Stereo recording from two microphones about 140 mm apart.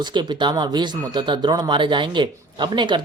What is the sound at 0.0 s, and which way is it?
Speech, 35° right (ahead or behind).